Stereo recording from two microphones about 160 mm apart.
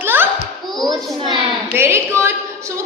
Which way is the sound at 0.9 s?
30° right (ahead or behind).